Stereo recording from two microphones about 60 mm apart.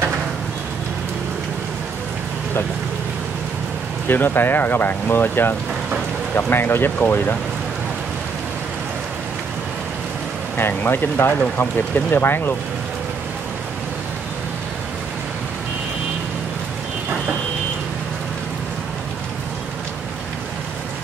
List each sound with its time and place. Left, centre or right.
4.1 s speech: left
10.6 s speech: left